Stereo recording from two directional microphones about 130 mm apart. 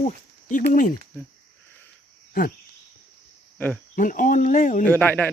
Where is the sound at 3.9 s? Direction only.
85° left.